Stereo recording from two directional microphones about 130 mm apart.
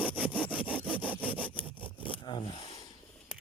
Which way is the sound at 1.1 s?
10° left (ahead or behind).